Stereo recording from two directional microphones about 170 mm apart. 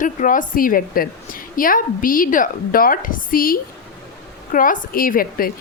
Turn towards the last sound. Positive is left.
turn(degrees=55)  # may be behind; listen again after turning